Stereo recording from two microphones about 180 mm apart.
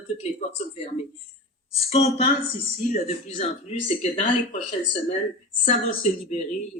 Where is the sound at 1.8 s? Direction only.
35° left (ahead or behind).